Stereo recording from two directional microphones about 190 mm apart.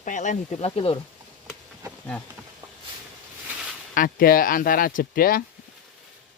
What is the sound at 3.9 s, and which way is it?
Speech, 45° left (ahead or behind).